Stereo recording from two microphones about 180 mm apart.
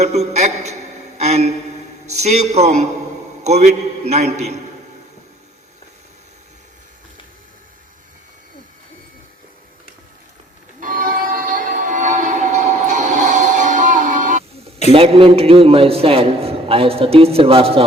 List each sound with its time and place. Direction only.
0.0 s a man's voice: 40° right (ahead or behind)
10.8 s train: 50° right (ahead or behind)
14.9 s a man's voice: 30° right (ahead or behind)